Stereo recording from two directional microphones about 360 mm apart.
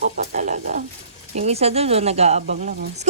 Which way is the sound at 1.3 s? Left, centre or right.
Centre.